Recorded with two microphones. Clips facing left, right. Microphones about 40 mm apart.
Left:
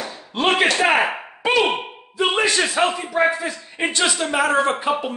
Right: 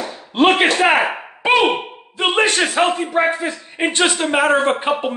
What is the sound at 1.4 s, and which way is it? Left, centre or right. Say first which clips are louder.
Speech: right 4 dB; right.